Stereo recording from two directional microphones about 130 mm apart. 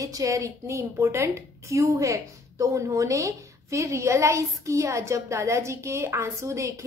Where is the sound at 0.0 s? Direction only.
25° right (ahead or behind).